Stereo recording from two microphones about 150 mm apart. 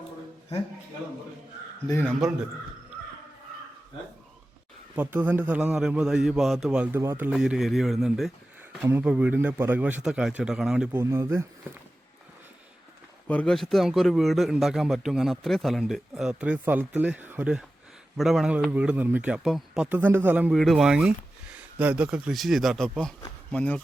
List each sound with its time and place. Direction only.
2.0 s a man's voice: centre (ahead or behind)
4.9 s a man's voice: 10° right (ahead or behind)
7.3 s a man's voice: 5° right (ahead or behind)
8.8 s a man's voice: 10° right (ahead or behind)
11.0 s speech: 20° right (ahead or behind)
13.2 s a man's voice: 10° left (ahead or behind); by 20.5 s 10° right (ahead or behind)
20.5 s a man's voice: centre (ahead or behind)